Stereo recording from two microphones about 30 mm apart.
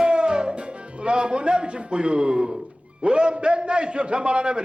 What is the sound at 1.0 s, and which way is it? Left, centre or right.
A man's voice, right.